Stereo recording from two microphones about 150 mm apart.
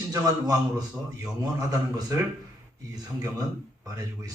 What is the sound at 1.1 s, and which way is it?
Speech, 20° right (ahead or behind).